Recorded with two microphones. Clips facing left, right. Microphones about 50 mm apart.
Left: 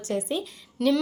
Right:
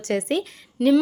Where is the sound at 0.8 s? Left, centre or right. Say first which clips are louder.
Right 5 dB; centre.